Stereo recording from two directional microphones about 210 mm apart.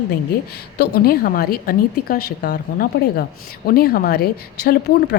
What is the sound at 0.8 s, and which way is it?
A woman's voice, 45° left (ahead or behind).